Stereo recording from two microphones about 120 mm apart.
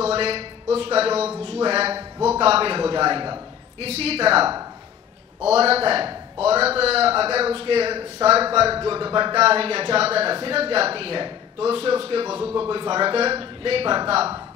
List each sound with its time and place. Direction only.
0.0 s speech: 55° right (ahead or behind)
3.8 s a man's voice: 60° right (ahead or behind)